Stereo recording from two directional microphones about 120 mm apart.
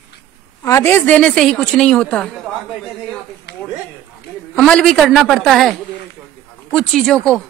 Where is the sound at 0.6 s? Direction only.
25° left (ahead or behind).